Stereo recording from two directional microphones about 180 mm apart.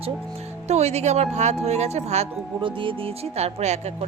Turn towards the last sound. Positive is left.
turn(degrees=-40)  # may be behind; listen again after turning